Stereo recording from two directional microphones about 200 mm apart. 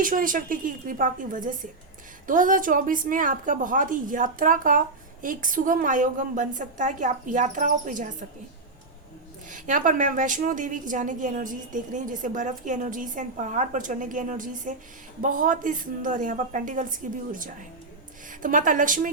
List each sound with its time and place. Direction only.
0.0 s a woman's voice: 45° right (ahead or behind)
9.5 s a woman's voice: 40° right (ahead or behind)